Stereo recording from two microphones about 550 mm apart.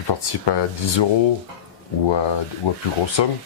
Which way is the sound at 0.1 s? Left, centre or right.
Left.